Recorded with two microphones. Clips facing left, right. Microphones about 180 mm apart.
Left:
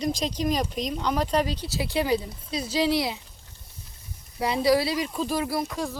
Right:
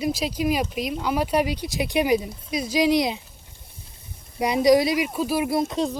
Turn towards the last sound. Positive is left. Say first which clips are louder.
# right 5 dB
turn(degrees=-20)  # may be behind; listen again after turning